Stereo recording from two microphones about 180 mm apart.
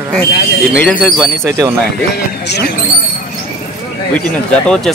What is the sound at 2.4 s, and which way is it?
Speech, 70° left (ahead or behind).